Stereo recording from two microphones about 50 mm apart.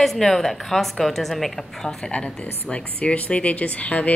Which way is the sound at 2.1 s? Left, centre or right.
Left.